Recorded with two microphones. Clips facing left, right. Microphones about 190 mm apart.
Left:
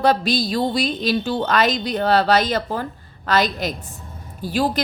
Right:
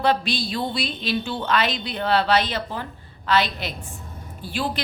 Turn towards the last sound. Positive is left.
turn(degrees=40)  # may be behind; listen again after turning